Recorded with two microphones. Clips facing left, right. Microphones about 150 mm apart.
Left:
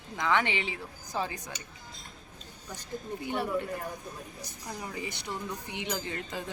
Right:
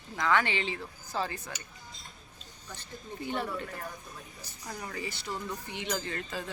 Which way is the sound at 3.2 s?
10° left (ahead or behind).